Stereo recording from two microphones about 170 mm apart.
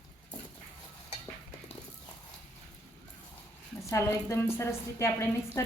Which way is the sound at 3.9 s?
15° left (ahead or behind).